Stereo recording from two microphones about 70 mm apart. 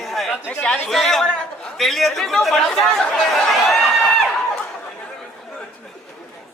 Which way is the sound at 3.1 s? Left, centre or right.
Centre.